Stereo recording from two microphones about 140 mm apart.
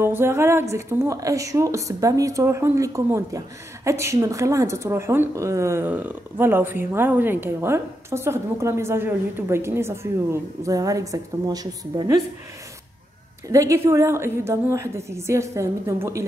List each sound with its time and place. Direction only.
0.0 s a woman's voice: 15° right (ahead or behind)
13.5 s a woman's voice: 20° right (ahead or behind)